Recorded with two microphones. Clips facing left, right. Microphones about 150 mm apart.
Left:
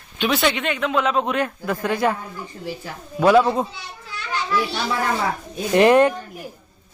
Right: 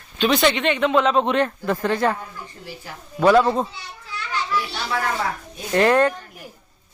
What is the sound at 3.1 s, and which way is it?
Speech, 5° left (ahead or behind).